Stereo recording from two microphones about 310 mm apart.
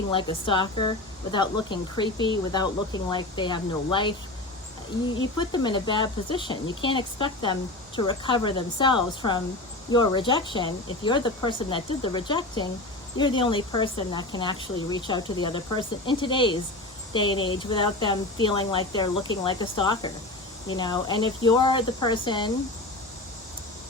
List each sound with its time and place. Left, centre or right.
0.1 s speech: centre
5.4 s speech: centre